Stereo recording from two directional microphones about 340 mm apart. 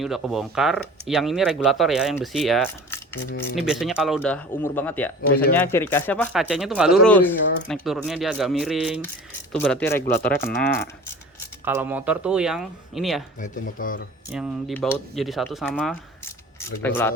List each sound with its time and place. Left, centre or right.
0.0 s speech: centre
10.3 s speech: left
11.6 s speech: centre
13.4 s speech: left
14.3 s speech: centre